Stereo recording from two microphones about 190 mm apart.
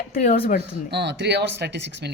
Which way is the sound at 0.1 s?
45° left (ahead or behind).